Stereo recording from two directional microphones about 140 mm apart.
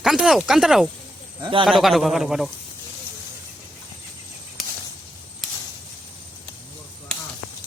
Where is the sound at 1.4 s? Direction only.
35° right (ahead or behind).